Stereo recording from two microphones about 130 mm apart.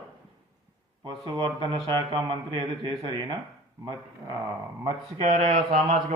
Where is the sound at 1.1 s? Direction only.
40° right (ahead or behind).